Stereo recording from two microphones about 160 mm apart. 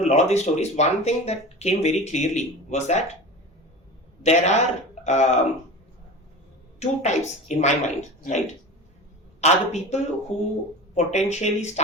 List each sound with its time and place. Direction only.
0.0 s speech: 45° left (ahead or behind)
4.2 s speech: 45° left (ahead or behind)
6.7 s speech: 45° left (ahead or behind)